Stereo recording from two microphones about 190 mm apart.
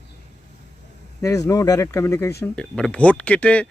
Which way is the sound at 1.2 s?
15° left (ahead or behind).